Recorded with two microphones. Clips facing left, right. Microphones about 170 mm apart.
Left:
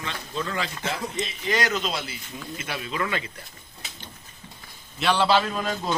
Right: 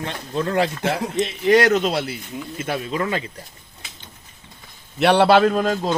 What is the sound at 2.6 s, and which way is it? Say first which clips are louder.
Speech: right 6 dB; 45° right (ahead or behind).